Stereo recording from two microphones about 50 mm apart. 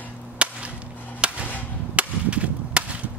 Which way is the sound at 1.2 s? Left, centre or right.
Right.